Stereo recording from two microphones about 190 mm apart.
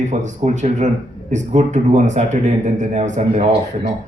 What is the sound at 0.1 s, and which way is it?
A man's voice, 40° right (ahead or behind).